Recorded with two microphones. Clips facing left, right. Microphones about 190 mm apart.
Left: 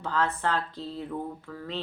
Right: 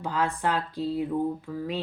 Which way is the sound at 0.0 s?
10° right (ahead or behind).